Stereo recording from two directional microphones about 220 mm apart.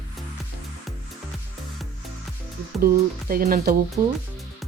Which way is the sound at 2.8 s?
40° right (ahead or behind).